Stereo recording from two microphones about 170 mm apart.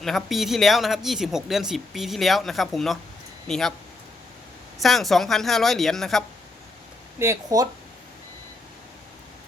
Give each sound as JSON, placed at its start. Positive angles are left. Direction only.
{"t": 0.0, "sound": "speech", "side_deg": 0}
{"t": 4.8, "sound": "speech", "side_deg": 0}
{"t": 7.2, "sound": "speech", "side_deg": -20}